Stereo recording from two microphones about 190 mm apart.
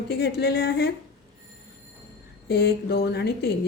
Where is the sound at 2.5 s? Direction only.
60° left (ahead or behind).